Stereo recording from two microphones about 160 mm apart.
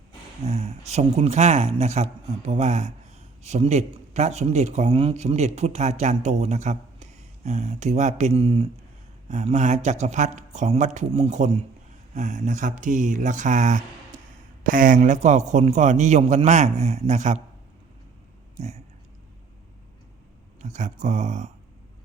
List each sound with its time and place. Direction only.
0.4 s speech: 40° right (ahead or behind)
20.6 s speech: 50° right (ahead or behind)